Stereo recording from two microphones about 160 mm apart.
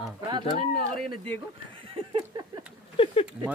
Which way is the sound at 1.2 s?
35° right (ahead or behind).